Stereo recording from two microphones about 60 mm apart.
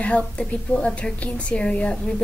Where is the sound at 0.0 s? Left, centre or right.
Left.